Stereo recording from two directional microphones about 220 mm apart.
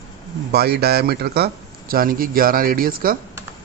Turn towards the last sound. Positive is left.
turn(degrees=-40)  # may be behind; listen again after turning